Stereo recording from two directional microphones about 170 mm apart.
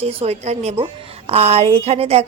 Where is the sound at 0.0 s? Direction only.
35° right (ahead or behind).